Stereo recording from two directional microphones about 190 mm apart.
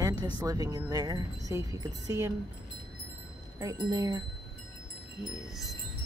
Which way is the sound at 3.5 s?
20° right (ahead or behind).